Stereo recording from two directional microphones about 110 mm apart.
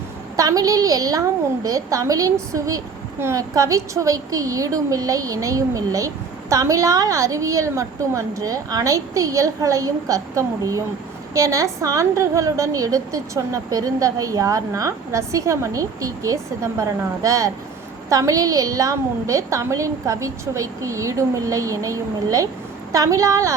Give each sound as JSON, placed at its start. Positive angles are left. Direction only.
{"t": 0.3, "sound": "a woman's voice", "side_deg": -30}